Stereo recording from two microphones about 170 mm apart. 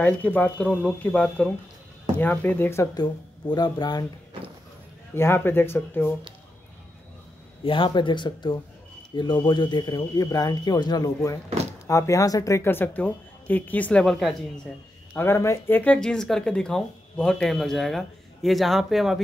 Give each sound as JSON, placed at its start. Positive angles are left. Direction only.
{"t": 0.0, "sound": "a woman's voice", "side_deg": 10}
{"t": 5.1, "sound": "a woman's voice", "side_deg": 15}
{"t": 7.6, "sound": "a woman's voice", "side_deg": 30}
{"t": 15.1, "sound": "speech", "side_deg": 15}